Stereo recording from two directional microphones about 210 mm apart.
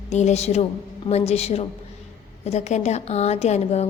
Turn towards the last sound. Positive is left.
turn(degrees=30)  # may be behind; listen again after turning